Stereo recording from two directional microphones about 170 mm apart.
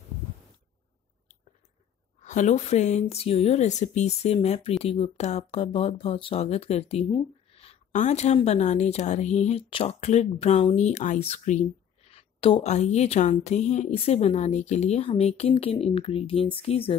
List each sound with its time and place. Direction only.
2.2 s speech: 45° left (ahead or behind)